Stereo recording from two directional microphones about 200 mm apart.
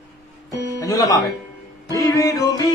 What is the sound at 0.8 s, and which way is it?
Speech, 15° left (ahead or behind).